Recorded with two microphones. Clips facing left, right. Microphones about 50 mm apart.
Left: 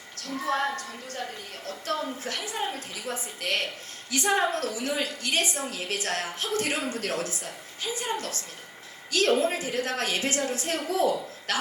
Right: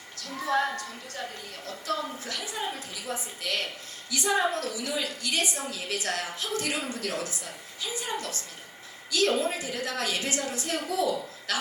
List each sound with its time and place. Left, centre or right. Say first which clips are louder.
0.4 s a woman's voice: right 1 dB; left